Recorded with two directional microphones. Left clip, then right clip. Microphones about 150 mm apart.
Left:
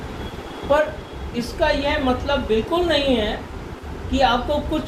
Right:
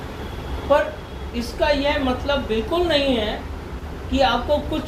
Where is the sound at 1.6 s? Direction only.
50° left (ahead or behind).